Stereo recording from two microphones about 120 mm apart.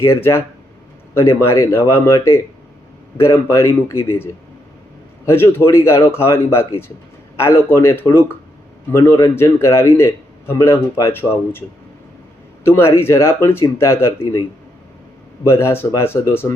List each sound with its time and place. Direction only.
0.1 s a man's voice: 20° left (ahead or behind)
12.6 s a man's voice: 20° left (ahead or behind)
15.4 s a man's voice: 25° left (ahead or behind)